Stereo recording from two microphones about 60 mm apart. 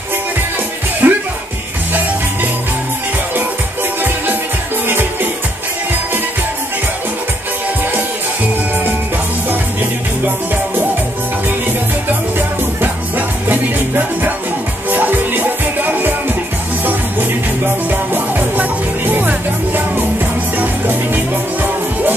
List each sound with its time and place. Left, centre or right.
1.0 s music: right
4.8 s music: right
13.5 s music: right
18.1 s music: right